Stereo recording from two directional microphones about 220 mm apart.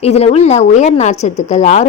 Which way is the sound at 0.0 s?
30° left (ahead or behind).